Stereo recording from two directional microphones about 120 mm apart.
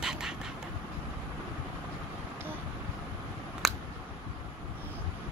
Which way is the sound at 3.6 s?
Centre (ahead or behind).